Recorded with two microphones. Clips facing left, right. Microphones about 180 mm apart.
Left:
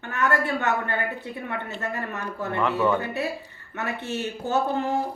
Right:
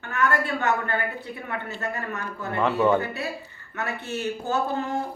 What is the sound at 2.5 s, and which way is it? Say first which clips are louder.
Speech: right 2 dB; 20° right (ahead or behind).